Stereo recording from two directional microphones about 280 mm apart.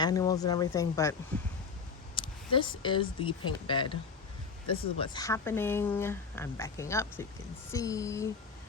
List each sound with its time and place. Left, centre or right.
0.0 s speech: centre
2.1 s speech: centre